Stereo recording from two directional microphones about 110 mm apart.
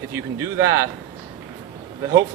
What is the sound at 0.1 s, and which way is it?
Speech, 25° right (ahead or behind).